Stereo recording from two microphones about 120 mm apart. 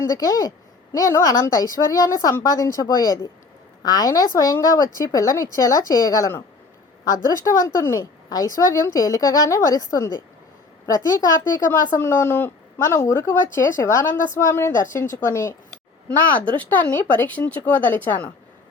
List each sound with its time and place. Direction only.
0.0 s a woman's voice: 25° left (ahead or behind)
16.6 s speech: 15° left (ahead or behind)